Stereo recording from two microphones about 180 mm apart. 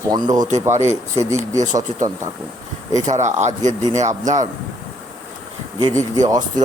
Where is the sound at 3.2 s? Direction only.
40° right (ahead or behind).